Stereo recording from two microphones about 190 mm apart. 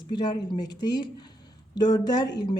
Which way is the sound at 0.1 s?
25° left (ahead or behind).